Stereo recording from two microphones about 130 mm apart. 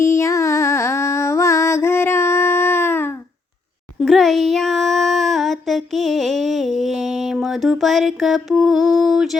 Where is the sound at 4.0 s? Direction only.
Centre (ahead or behind).